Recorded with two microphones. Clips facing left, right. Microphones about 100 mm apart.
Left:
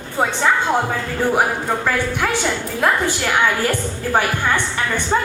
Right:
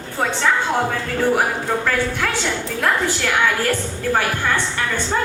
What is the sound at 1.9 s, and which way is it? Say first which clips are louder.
A woman's voice: left 1 dB; 15° left (ahead or behind).